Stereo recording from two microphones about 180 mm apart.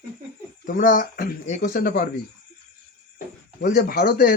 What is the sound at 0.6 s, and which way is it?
Speech, 50° left (ahead or behind).